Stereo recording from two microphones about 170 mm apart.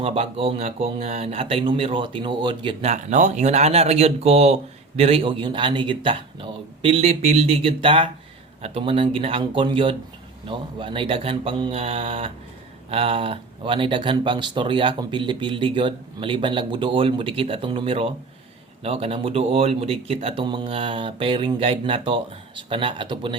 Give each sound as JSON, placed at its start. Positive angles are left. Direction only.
{"t": 0.0, "sound": "speech", "side_deg": -35}
{"t": 2.9, "sound": "speech", "side_deg": -45}